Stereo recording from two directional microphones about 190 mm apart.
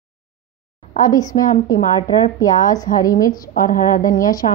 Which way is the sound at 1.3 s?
45° left (ahead or behind).